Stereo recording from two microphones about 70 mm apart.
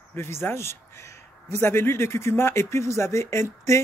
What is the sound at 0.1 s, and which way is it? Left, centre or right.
A man's voice, left.